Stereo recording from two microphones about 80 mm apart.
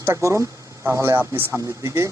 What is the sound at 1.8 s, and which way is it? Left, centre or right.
Speech, right.